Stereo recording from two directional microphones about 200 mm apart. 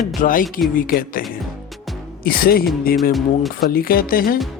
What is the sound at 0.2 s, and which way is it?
Speech, 45° left (ahead or behind).